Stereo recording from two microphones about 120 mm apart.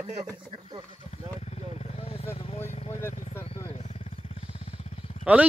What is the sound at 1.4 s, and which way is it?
Vehicle, 60° left (ahead or behind).